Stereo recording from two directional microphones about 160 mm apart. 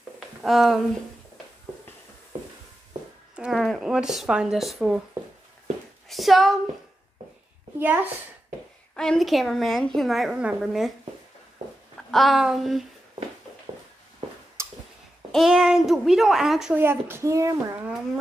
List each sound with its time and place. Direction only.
0.4 s a woman's voice: centre (ahead or behind)
3.3 s a woman's voice: centre (ahead or behind)
6.0 s speech: centre (ahead or behind)
7.8 s speech: 10° right (ahead or behind)
8.9 s a woman's voice: 5° left (ahead or behind)
12.1 s a woman's voice: centre (ahead or behind)
14.6 s a sound: 15° right (ahead or behind)
15.3 s a woman's voice: centre (ahead or behind)
16.8 s speech: 15° right (ahead or behind)